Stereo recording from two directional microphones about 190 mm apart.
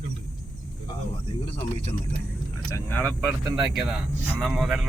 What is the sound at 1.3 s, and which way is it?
Speech, 30° left (ahead or behind).